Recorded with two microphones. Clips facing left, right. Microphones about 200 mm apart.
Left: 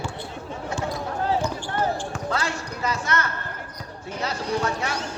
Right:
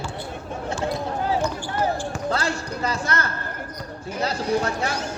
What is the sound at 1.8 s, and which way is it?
Speech, 5° right (ahead or behind).